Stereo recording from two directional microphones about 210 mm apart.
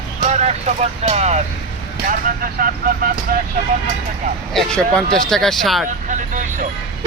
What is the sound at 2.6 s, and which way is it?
Speech, 45° right (ahead or behind).